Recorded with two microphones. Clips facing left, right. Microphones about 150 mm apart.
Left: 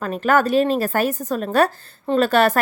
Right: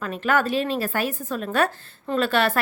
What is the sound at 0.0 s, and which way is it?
Speech, 40° left (ahead or behind).